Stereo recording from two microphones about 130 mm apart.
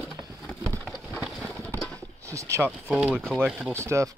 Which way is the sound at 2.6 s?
5° right (ahead or behind).